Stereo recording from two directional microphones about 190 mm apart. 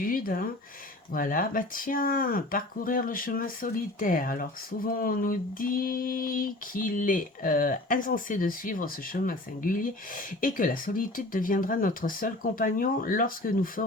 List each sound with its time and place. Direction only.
0.0 s speech: 50° left (ahead or behind)